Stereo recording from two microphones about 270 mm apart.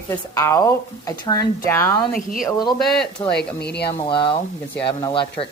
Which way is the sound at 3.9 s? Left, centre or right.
Centre.